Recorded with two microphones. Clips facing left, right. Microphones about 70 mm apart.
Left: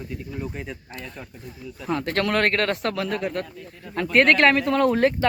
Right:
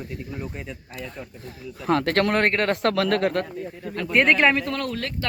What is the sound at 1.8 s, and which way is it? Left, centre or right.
Speech, right.